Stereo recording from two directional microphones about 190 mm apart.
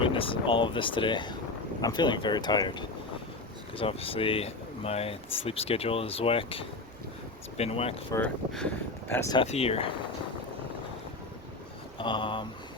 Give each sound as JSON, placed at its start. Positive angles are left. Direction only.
{"t": 0.0, "sound": "speech", "side_deg": 25}
{"t": 8.1, "sound": "speech", "side_deg": 5}
{"t": 9.3, "sound": "speech", "side_deg": 30}
{"t": 11.9, "sound": "speech", "side_deg": 25}